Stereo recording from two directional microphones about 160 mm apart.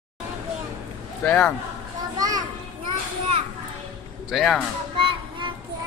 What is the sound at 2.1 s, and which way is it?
Children playing, 25° right (ahead or behind).